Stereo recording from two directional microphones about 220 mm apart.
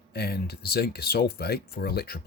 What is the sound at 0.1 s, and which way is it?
Speech, 45° left (ahead or behind).